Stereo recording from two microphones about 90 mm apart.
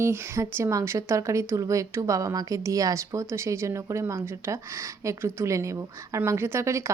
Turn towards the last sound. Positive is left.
turn(degrees=-35)  # may be behind; listen again after turning